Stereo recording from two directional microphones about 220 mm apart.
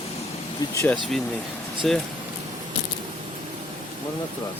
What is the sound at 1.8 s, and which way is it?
Speech, centre (ahead or behind).